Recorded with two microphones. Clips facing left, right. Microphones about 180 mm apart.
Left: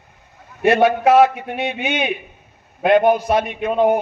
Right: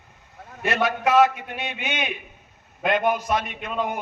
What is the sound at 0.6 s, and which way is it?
A man's voice, 55° left (ahead or behind).